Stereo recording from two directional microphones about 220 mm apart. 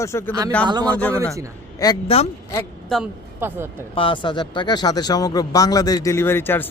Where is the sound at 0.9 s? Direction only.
5° left (ahead or behind).